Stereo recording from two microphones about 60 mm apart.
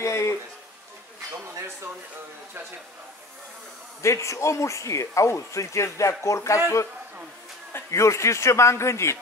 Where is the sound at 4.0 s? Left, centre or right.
Left.